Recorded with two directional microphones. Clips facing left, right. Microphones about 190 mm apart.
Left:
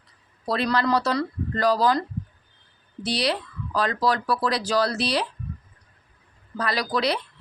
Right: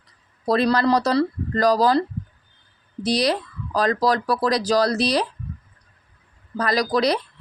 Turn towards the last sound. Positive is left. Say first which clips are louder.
# right 5 dB
turn(degrees=-40)  # may be behind; listen again after turning